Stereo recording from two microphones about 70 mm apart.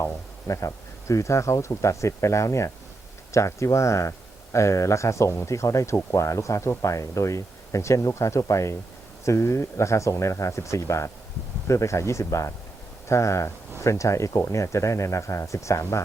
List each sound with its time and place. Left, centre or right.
0.0 s speech: left